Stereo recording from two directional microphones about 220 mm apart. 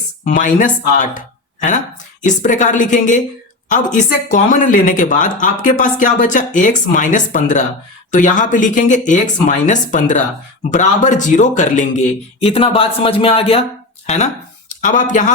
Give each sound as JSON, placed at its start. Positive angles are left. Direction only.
{"t": 0.3, "sound": "speech", "side_deg": 35}
{"t": 2.2, "sound": "a man's voice", "side_deg": 35}
{"t": 14.8, "sound": "speech", "side_deg": 35}